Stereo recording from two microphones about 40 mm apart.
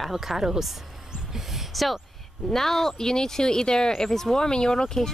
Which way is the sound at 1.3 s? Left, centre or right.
Centre.